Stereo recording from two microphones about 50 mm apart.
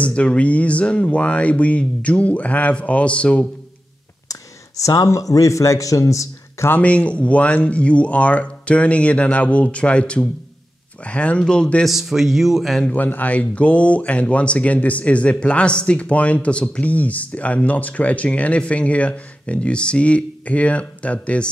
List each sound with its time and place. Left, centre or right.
0.0 s speech: left
4.8 s a man's voice: left
6.8 s speech: left
11.8 s speech: centre
12.8 s speech: left